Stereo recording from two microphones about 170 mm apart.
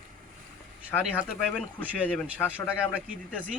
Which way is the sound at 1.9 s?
5° right (ahead or behind).